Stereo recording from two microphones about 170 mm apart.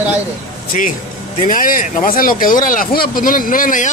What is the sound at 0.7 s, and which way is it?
Speech, 50° left (ahead or behind).